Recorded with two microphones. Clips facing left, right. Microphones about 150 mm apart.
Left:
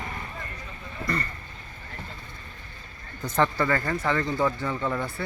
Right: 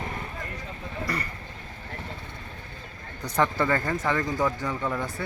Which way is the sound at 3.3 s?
15° right (ahead or behind).